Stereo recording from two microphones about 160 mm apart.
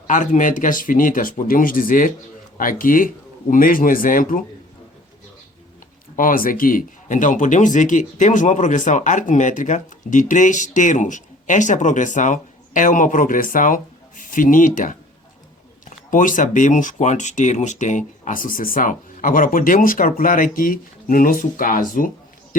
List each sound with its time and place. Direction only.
0.1 s speech: 55° left (ahead or behind)
6.1 s speech: 60° left (ahead or behind)
16.0 s speech: 55° left (ahead or behind)